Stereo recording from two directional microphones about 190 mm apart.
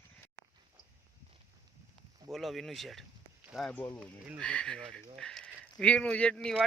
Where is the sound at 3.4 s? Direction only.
Centre (ahead or behind).